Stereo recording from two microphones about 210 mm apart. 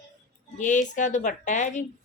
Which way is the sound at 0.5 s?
35° left (ahead or behind).